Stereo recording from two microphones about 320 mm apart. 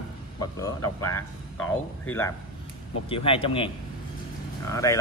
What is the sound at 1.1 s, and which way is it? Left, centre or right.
Speech, centre.